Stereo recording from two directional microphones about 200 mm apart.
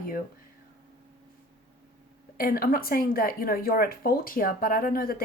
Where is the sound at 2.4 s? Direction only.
50° left (ahead or behind).